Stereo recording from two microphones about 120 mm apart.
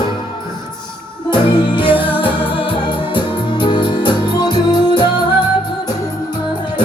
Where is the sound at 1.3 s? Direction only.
40° left (ahead or behind).